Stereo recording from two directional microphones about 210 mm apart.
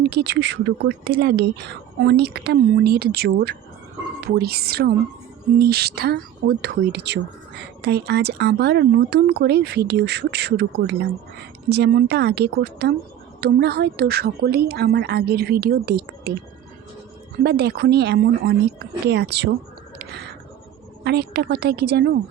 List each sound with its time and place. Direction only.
0.1 s speech: 50° right (ahead or behind)
17.4 s speech: 50° right (ahead or behind)
20.0 s a sound: 50° right (ahead or behind)
21.0 s speech: 50° right (ahead or behind)